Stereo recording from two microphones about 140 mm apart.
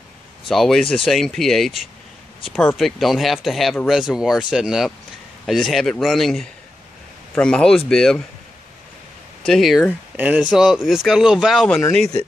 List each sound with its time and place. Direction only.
0.5 s speech: centre (ahead or behind)
9.4 s speech: centre (ahead or behind)